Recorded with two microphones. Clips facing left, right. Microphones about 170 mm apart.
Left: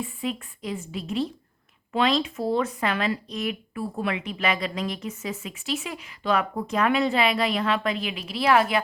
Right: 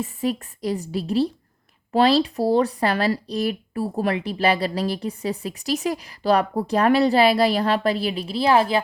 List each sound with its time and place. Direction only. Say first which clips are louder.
0.0 s speech: right 5 dB; 40° right (ahead or behind)